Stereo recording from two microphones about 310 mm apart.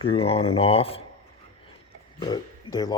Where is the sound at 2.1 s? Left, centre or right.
Centre.